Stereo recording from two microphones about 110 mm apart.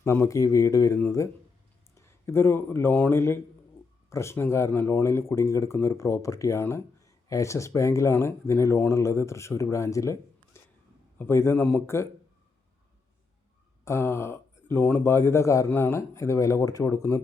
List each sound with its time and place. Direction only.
0.0 s speech: 25° left (ahead or behind)
13.8 s speech: 25° left (ahead or behind)